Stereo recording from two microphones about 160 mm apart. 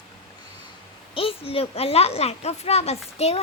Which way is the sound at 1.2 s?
35° left (ahead or behind).